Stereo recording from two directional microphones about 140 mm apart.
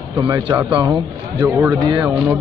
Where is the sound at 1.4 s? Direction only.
20° right (ahead or behind).